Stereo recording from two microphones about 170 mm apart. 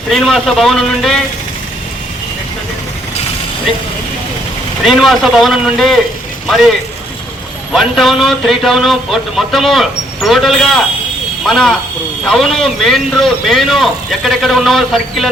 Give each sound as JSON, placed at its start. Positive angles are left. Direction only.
{"t": 0.1, "sound": "a man's voice", "side_deg": 0}
{"t": 4.8, "sound": "a man's voice", "side_deg": 0}
{"t": 7.7, "sound": "a man's voice", "side_deg": 0}